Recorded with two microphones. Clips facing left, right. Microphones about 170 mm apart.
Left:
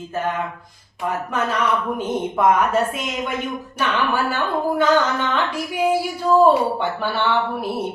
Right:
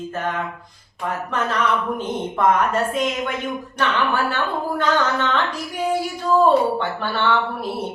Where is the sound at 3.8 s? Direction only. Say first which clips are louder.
Even; 10° left (ahead or behind).